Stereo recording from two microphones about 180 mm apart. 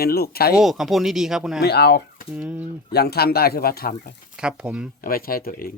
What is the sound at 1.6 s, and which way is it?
Speech, 65° left (ahead or behind).